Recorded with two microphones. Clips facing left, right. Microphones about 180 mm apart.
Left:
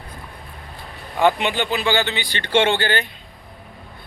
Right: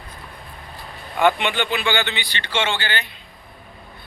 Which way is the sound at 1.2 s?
35° left (ahead or behind).